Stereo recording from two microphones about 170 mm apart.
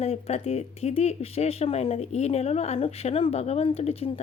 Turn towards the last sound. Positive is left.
turn(degrees=35)  # may be behind; listen again after turning